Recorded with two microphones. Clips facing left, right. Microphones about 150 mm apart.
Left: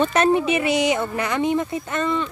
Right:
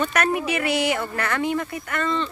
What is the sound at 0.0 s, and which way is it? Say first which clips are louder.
Speech: left 5 dB; 25° left (ahead or behind).